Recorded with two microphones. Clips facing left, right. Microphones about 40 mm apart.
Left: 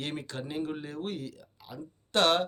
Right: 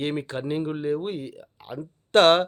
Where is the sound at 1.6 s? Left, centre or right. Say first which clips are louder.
Right 8 dB; right.